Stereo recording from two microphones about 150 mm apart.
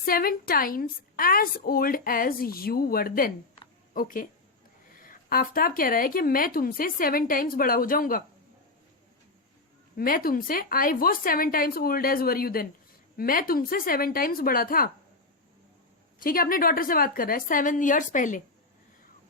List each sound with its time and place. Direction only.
0.0 s a woman's voice: 80° left
3.9 s a woman's voice: 65° left (ahead or behind)
10.0 s a woman's voice: 75° left (ahead or behind)
16.2 s a woman's voice: 75° left (ahead or behind)